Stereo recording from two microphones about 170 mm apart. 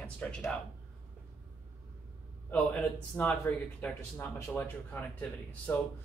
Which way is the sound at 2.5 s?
10° left (ahead or behind).